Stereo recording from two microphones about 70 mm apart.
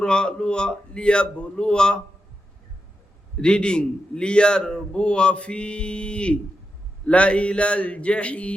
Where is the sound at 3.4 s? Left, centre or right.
Centre.